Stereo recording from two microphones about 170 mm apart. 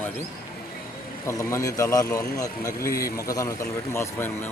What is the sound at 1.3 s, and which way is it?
Speech, 15° left (ahead or behind).